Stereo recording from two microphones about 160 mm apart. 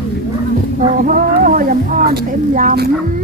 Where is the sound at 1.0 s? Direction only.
60° right (ahead or behind).